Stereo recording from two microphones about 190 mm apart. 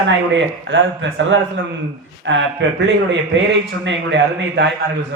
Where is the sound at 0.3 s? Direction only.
70° right (ahead or behind).